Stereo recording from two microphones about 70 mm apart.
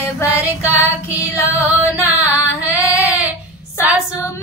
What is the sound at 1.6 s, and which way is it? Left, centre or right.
Music, right.